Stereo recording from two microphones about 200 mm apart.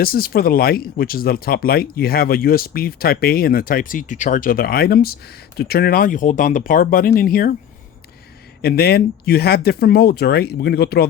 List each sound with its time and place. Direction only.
0.0 s speech: 50° left (ahead or behind)
8.6 s speech: 50° left (ahead or behind)